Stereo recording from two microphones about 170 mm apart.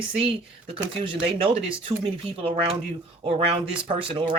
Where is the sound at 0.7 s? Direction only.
30° right (ahead or behind).